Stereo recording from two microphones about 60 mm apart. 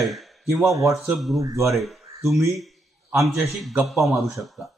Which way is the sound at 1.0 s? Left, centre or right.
Centre.